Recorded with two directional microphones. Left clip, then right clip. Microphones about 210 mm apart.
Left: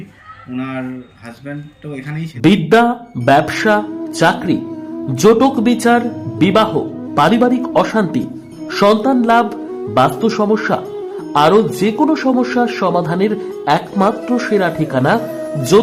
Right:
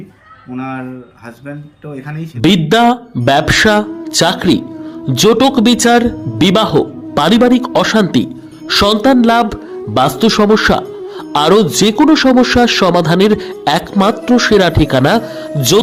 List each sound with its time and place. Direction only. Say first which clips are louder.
2.4 s a man's voice: right 1 dB; 25° right (ahead or behind)